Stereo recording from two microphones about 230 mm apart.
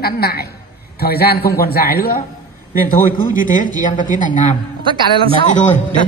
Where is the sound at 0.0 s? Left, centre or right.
Left.